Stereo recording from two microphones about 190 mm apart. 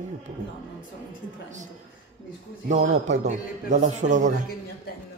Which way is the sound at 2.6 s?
40° right (ahead or behind).